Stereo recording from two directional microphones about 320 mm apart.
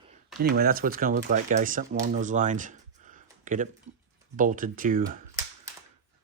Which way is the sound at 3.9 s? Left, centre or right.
Right.